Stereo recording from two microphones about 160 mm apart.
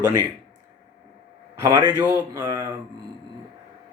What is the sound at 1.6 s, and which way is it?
Speech, 20° right (ahead or behind).